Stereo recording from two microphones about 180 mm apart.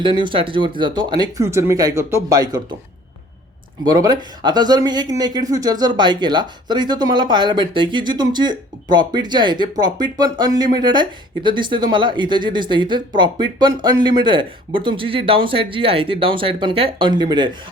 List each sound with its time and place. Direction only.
0.0 s speech: 25° right (ahead or behind)
3.8 s speech: 20° right (ahead or behind)